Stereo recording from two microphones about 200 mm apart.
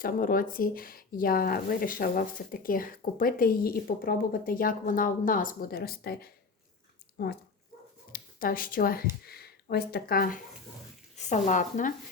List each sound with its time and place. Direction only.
0.0 s speech: 45° left (ahead or behind)
11.2 s speech: 35° left (ahead or behind)